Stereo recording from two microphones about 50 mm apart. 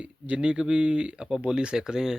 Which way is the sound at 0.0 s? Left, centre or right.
Right.